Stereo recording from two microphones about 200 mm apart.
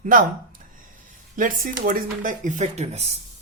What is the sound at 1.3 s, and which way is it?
Speech, 40° right (ahead or behind).